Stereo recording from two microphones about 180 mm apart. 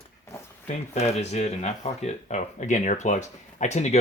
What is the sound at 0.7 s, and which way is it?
Speech, 40° left (ahead or behind).